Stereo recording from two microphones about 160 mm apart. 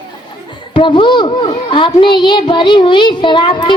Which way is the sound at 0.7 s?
30° left (ahead or behind).